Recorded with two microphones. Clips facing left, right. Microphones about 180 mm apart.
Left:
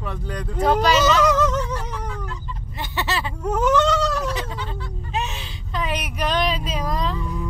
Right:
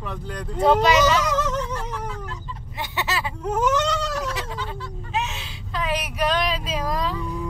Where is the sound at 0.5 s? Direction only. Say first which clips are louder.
Right 1 dB; 25° right (ahead or behind).